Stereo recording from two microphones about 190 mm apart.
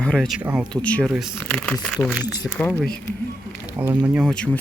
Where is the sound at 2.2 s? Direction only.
20° left (ahead or behind).